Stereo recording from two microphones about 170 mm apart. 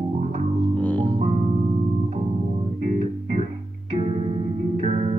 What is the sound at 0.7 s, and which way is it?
Music, 10° left (ahead or behind).